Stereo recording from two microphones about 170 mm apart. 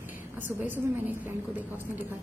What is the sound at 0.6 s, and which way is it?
Speech, 10° right (ahead or behind).